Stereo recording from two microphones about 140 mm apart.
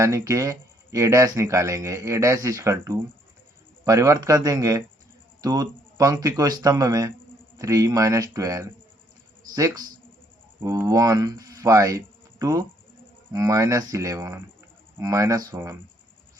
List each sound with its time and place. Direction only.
0.0 s speech: 20° right (ahead or behind)